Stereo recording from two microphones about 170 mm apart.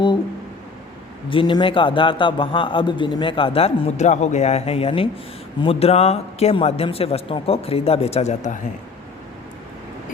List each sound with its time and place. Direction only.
1.3 s speech: 30° left (ahead or behind); by 8.5 s 45° left (ahead or behind)